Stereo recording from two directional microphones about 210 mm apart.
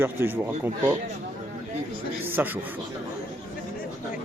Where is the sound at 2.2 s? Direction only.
10° right (ahead or behind).